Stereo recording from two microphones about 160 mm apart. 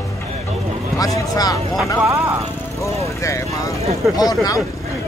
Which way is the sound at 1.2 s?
20° left (ahead or behind).